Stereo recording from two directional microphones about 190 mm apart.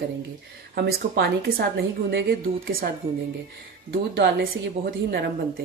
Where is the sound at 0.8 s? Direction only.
55° right (ahead or behind).